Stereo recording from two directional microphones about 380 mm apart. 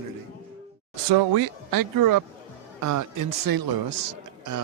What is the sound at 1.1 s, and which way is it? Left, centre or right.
Speech, right.